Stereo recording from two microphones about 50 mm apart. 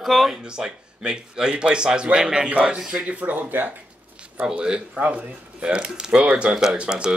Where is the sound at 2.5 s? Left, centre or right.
Right.